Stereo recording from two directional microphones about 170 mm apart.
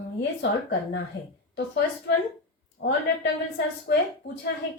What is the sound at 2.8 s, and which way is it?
A woman's voice, 70° left (ahead or behind).